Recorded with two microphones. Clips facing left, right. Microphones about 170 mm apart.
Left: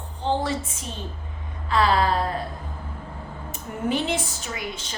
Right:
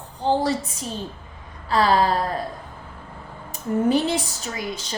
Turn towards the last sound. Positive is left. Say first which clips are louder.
# right 3 dB
turn(degrees=-35)  # may be behind; listen again after turning